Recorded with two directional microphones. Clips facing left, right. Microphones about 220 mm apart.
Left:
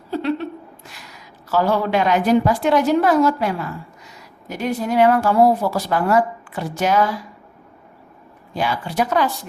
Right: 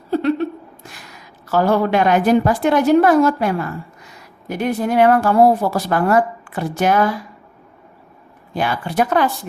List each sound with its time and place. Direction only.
0.1 s a sound: 45° right (ahead or behind)
1.5 s a woman's voice: 50° right (ahead or behind)
8.5 s a woman's voice: 55° right (ahead or behind)